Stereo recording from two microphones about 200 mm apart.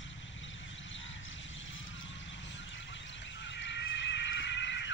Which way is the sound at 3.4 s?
65° left (ahead or behind).